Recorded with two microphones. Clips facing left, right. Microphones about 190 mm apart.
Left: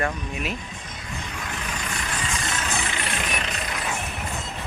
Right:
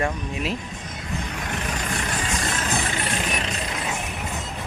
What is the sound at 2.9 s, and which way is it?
Vehicle, 35° right (ahead or behind).